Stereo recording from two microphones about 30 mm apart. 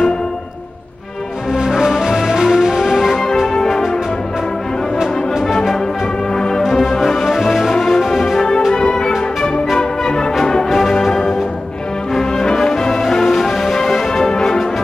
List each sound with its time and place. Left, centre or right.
1.5 s music: centre
6.3 s music: centre
8.7 s music: left
10.7 s music: centre
12.2 s brass instrument: centre
12.7 s music: left